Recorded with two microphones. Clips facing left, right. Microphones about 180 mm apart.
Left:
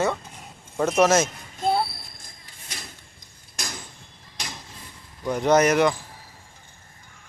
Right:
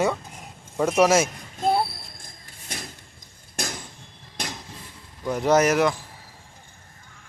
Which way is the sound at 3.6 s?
55° right (ahead or behind).